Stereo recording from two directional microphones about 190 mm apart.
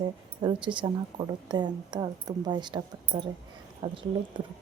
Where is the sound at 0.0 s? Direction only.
25° right (ahead or behind).